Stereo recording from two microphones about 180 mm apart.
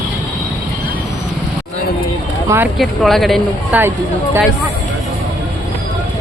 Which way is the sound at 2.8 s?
Centre (ahead or behind).